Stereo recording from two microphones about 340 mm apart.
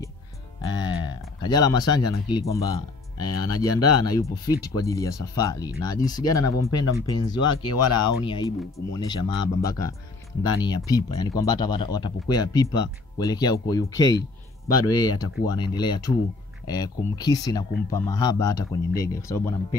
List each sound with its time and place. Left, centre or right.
0.6 s music: centre
2.2 s speech: centre
3.4 s speech: left
4.0 s speech: centre
7.6 s speech: left
8.3 s speech: centre